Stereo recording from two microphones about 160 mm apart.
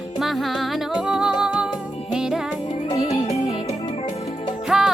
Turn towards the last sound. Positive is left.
turn(degrees=-5)  # may be behind; listen again after turning